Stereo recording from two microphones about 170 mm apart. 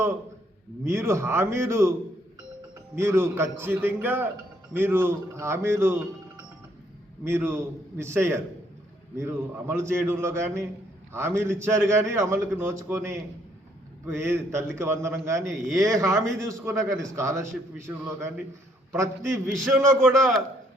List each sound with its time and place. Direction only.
0.9 s a man's voice: 15° right (ahead or behind)
2.9 s a man's voice: 15° right (ahead or behind)
7.3 s a man's voice: 15° right (ahead or behind)